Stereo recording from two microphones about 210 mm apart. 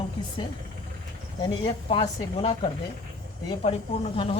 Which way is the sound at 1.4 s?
20° left (ahead or behind).